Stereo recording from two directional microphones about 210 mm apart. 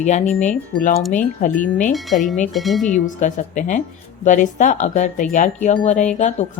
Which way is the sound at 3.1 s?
35° left (ahead or behind).